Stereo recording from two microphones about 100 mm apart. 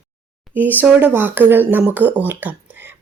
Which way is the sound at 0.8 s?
20° right (ahead or behind).